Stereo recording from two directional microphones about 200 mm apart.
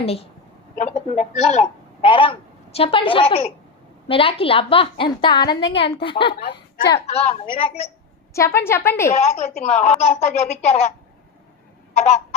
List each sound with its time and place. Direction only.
0.0 s a woman's voice: 30° left (ahead or behind)
8.3 s a woman's voice: 15° left (ahead or behind)
9.1 s speech: 35° left (ahead or behind)
11.9 s speech: 35° left (ahead or behind)